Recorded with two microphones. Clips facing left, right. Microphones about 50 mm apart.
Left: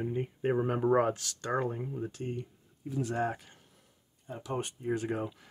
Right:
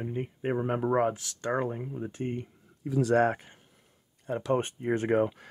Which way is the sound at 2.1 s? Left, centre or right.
Right.